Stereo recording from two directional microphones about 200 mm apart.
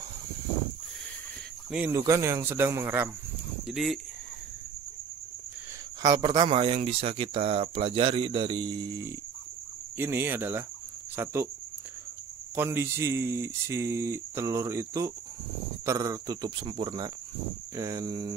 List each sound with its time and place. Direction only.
1.7 s speech: 10° right (ahead or behind)
3.6 s speech: centre (ahead or behind)
6.0 s speech: 20° right (ahead or behind)
12.5 s speech: 10° right (ahead or behind)